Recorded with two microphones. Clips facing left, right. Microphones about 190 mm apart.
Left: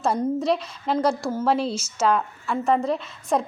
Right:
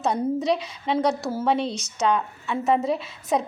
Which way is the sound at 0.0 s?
Centre (ahead or behind).